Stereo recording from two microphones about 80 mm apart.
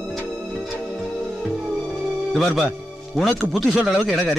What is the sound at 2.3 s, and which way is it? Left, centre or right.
Speech, centre.